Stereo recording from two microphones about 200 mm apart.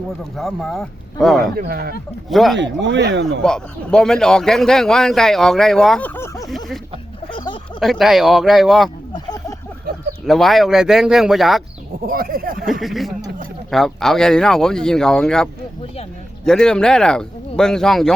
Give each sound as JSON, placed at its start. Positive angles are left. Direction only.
{"t": 0.3, "sound": "a man's voice", "side_deg": 0}
{"t": 1.5, "sound": "speech", "side_deg": -50}
{"t": 2.3, "sound": "a man's voice", "side_deg": 0}
{"t": 2.6, "sound": "speech", "side_deg": -65}
{"t": 3.4, "sound": "a man's voice", "side_deg": 5}
{"t": 6.1, "sound": "speech", "side_deg": 15}
{"t": 7.3, "sound": "a sound", "side_deg": 25}
{"t": 7.8, "sound": "a man's voice", "side_deg": 0}
{"t": 9.1, "sound": "a sound", "side_deg": 20}
{"t": 10.2, "sound": "a man's voice", "side_deg": 0}
{"t": 12.0, "sound": "speech", "side_deg": -45}
{"t": 12.8, "sound": "a man's voice", "side_deg": 0}
{"t": 16.5, "sound": "a man's voice", "side_deg": 5}